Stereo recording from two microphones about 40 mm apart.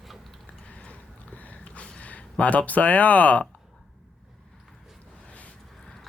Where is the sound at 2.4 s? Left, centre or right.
Left.